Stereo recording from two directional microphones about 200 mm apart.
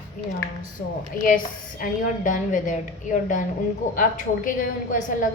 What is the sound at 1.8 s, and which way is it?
A woman's voice, 40° left (ahead or behind).